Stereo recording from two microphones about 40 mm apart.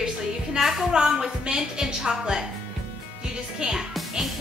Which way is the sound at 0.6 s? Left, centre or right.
Centre.